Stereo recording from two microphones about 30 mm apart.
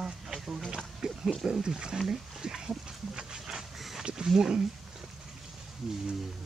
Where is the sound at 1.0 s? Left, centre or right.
Right.